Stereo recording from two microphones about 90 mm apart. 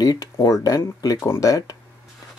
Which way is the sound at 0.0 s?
45° left (ahead or behind).